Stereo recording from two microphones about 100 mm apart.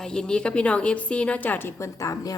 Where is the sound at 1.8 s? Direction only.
30° left (ahead or behind).